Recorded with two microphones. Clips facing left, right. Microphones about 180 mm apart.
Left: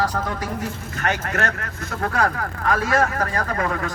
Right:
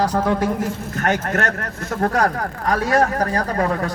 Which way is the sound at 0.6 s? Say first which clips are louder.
Right 5 dB; 45° right (ahead or behind).